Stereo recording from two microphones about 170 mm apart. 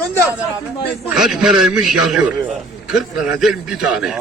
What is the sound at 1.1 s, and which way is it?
A man's voice, centre (ahead or behind).